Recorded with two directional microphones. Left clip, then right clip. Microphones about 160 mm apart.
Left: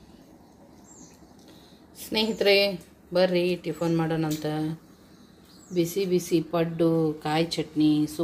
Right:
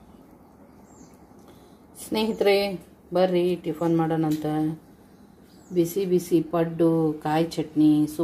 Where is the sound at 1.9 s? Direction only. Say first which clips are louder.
Right 1 dB; 15° right (ahead or behind).